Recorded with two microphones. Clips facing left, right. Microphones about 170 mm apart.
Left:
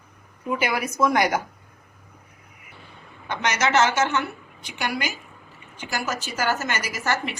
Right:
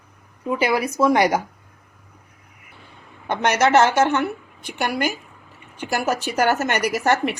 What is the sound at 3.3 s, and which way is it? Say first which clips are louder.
A woman's voice: right 6 dB; 55° right (ahead or behind).